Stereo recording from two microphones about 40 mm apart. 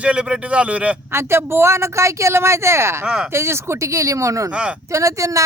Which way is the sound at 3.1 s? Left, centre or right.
Right.